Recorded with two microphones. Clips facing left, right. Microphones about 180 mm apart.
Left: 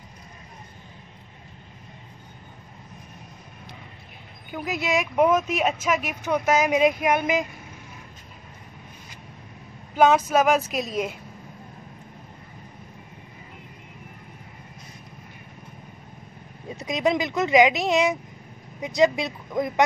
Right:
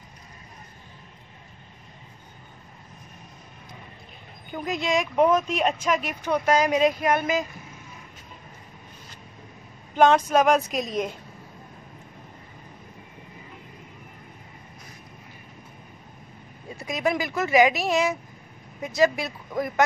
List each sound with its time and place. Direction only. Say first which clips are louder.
4.5 s speech: even; 5° left (ahead or behind)
9.9 s speech: even; 5° left (ahead or behind)
16.7 s speech: left 2 dB; 20° left (ahead or behind)